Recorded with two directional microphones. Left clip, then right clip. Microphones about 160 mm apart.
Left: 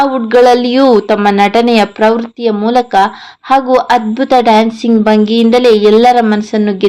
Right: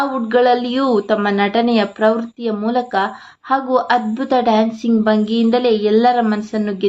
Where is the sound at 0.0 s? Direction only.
15° left (ahead or behind).